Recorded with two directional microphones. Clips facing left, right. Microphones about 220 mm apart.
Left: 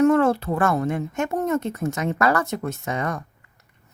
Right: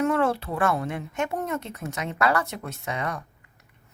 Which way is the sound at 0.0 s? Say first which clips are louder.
Left 6 dB; 45° left (ahead or behind).